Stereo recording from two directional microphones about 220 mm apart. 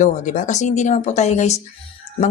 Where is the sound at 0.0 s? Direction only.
35° left (ahead or behind).